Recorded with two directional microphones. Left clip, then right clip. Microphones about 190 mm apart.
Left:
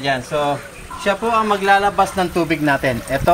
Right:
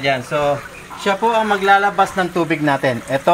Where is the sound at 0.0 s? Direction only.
60° right (ahead or behind).